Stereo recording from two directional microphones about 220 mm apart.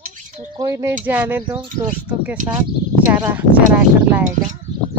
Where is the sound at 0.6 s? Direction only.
15° right (ahead or behind).